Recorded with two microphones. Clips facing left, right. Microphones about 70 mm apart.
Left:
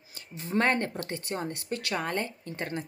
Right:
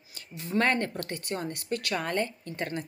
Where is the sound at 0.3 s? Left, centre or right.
Left.